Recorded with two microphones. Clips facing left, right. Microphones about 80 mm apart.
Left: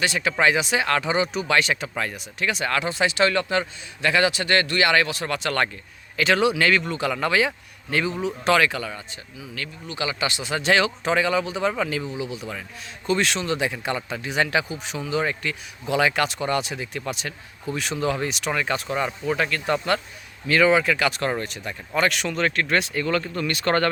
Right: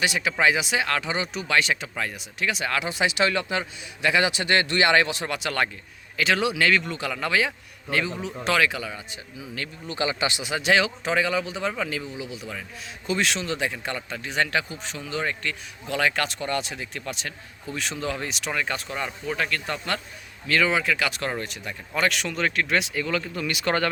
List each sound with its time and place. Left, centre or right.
0.0 s speech: centre
9.4 s a man's voice: right
10.5 s speech: centre